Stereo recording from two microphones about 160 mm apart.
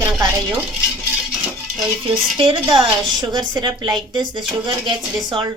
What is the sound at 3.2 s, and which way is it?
A woman's voice, 25° right (ahead or behind).